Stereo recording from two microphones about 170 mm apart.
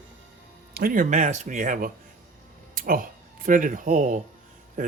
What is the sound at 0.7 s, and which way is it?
Speech, 60° right (ahead or behind).